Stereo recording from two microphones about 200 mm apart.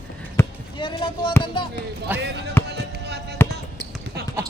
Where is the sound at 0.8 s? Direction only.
25° left (ahead or behind).